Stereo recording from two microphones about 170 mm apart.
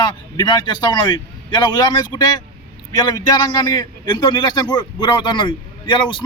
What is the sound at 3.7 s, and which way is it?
Speech, 25° left (ahead or behind).